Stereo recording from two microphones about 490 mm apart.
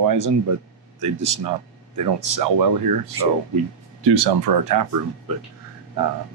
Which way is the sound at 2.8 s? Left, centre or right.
Right.